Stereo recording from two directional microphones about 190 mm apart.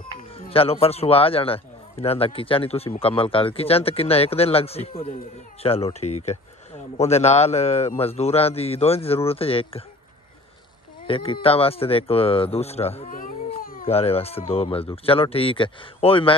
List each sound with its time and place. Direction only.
0.5 s speech: 30° left (ahead or behind)
11.1 s speech: 30° left (ahead or behind)
13.6 s cat: 50° left (ahead or behind)
13.8 s speech: 30° left (ahead or behind)